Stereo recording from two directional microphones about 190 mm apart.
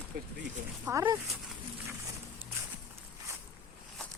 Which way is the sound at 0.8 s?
10° right (ahead or behind).